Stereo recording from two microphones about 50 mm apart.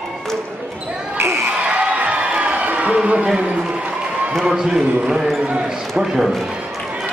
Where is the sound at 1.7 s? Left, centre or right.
Right.